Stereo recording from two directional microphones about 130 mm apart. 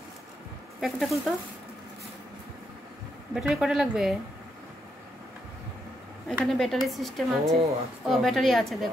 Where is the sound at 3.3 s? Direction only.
5° right (ahead or behind).